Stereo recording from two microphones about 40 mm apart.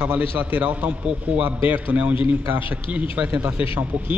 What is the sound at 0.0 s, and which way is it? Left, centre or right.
A man's voice, right.